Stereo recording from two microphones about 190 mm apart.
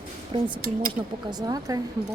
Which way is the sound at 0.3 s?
30° right (ahead or behind).